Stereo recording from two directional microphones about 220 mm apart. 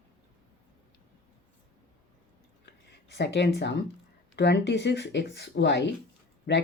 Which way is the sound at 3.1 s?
50° left (ahead or behind).